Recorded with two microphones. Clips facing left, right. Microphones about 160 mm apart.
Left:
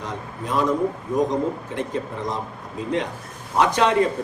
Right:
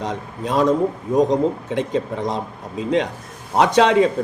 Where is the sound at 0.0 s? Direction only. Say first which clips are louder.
Right 5 dB; 80° right.